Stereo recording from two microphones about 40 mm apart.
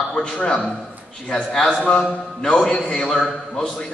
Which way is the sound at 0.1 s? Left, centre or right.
Left.